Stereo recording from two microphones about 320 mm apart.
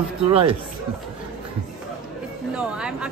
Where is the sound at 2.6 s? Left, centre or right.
Centre.